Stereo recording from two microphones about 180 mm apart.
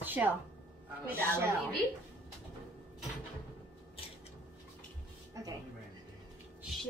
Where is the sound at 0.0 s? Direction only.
10° right (ahead or behind).